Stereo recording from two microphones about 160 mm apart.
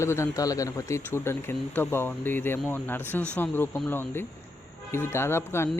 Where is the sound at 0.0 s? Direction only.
15° left (ahead or behind).